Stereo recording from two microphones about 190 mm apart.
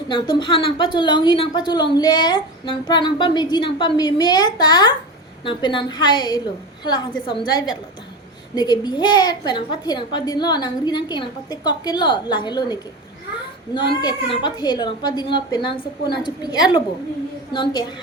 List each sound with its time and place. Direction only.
0.1 s a woman's voice: 25° left (ahead or behind)
14.0 s a woman's voice: 20° left (ahead or behind)